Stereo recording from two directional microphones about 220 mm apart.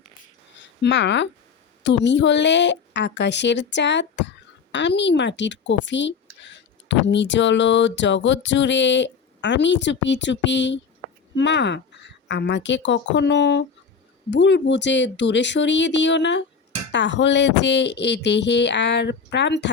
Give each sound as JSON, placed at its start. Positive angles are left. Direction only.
{"t": 0.5, "sound": "speech", "side_deg": 55}
{"t": 11.0, "sound": "a sound", "side_deg": 20}
{"t": 11.3, "sound": "speech", "side_deg": 55}